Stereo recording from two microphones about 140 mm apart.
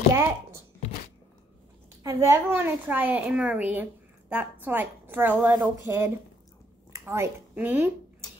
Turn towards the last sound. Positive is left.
turn(degrees=-15)  # may be behind; listen again after turning